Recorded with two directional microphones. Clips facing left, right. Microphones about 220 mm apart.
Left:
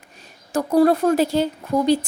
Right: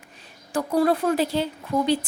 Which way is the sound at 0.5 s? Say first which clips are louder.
Left 5 dB; 45° left (ahead or behind).